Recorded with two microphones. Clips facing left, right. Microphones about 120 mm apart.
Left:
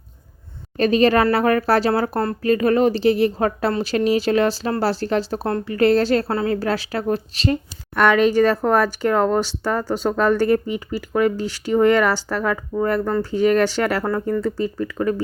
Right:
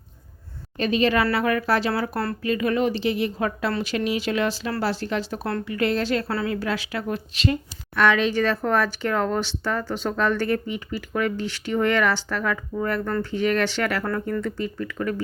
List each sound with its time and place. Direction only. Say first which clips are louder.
0.8 s speech: left 5 dB; 40° left (ahead or behind)